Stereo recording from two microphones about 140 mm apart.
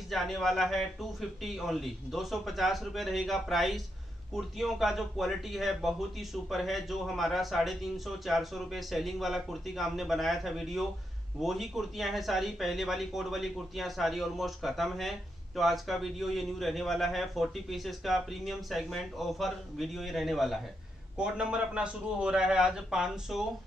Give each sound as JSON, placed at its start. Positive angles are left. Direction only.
{"t": 0.1, "sound": "speech", "side_deg": 0}